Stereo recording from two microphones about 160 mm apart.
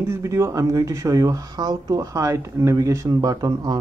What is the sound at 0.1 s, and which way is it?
Speech, 15° right (ahead or behind).